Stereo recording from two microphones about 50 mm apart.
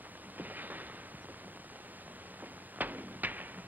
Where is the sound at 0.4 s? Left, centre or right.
Right.